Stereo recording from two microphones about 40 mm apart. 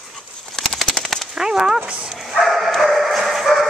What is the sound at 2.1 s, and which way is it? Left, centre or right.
Dog, centre.